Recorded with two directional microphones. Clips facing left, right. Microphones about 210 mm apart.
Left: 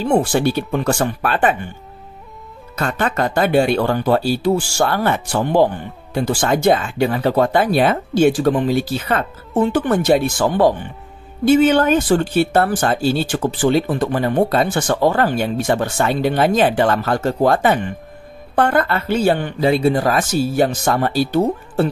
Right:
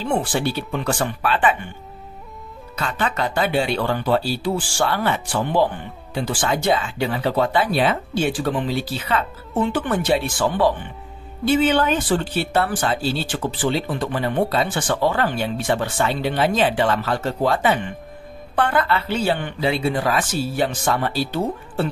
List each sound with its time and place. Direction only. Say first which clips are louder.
0.0 s speech: left 6 dB; 45° left (ahead or behind)
2.7 s speech: left 4 dB; 45° left (ahead or behind)